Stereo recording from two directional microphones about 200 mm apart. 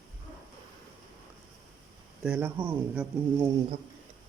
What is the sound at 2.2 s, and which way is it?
Speech, 5° right (ahead or behind).